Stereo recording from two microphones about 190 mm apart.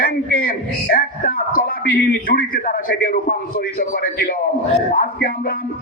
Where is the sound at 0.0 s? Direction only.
50° left (ahead or behind).